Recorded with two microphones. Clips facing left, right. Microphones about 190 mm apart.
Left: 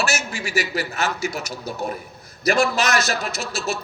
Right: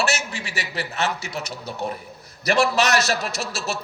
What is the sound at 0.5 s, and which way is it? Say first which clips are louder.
Speech: left 5 dB; 35° right (ahead or behind).